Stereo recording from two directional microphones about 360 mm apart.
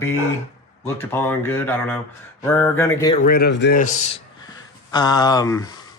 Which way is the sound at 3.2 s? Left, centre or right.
Left.